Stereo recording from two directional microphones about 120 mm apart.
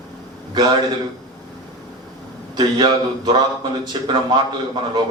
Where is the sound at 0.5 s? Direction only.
35° right (ahead or behind).